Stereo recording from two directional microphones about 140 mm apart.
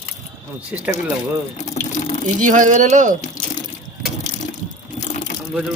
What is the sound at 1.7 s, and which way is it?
Water, 55° left (ahead or behind).